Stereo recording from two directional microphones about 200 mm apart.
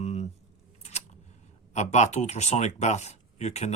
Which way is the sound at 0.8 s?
35° left (ahead or behind).